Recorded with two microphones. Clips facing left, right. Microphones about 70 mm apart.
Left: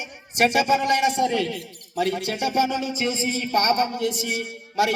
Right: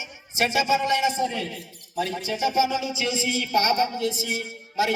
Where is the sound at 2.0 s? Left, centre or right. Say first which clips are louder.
Left 2 dB; left.